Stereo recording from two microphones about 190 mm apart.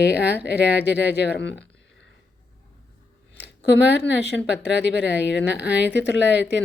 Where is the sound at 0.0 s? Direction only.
60° left (ahead or behind).